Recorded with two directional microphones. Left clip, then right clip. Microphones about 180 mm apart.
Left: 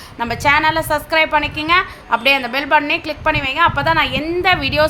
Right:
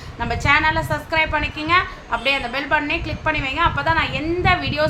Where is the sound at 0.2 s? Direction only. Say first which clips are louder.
Left 3 dB; 55° left (ahead or behind).